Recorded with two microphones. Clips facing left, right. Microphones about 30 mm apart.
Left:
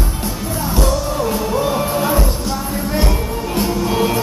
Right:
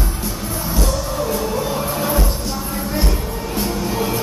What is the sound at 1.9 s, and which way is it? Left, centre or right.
Music, centre.